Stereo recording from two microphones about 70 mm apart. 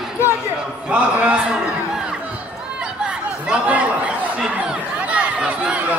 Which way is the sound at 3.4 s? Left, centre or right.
Centre.